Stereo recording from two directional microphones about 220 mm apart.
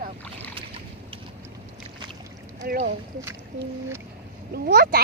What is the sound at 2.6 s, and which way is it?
Speech, 40° right (ahead or behind).